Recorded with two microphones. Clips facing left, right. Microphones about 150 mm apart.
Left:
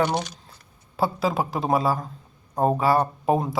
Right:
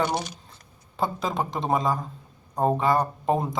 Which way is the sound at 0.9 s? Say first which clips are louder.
Left 3 dB; 5° left (ahead or behind).